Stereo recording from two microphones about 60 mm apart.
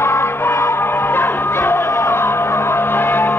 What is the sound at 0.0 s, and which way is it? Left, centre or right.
Music, left.